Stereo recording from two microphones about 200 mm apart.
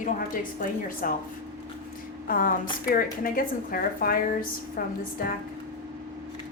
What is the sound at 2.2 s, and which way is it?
A woman's voice, 45° left (ahead or behind).